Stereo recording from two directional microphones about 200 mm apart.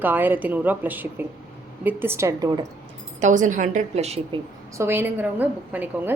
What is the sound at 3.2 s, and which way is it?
Speech, 40° right (ahead or behind).